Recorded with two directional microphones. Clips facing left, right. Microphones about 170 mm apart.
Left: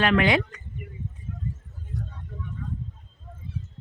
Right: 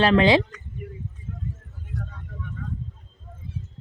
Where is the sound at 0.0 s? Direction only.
30° right (ahead or behind).